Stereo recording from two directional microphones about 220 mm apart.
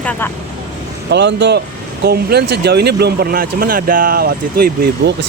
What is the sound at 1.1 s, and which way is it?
Speech, 50° right (ahead or behind).